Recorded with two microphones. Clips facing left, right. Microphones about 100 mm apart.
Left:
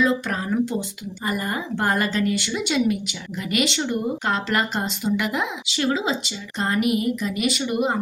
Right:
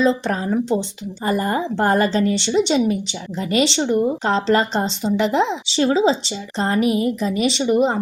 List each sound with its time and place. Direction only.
0.0 s a woman's voice: 30° right (ahead or behind)